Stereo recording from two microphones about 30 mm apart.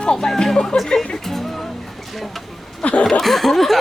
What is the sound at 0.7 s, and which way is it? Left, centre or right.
Speech, left.